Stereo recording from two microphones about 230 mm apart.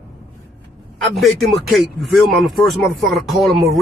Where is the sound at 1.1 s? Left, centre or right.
Centre.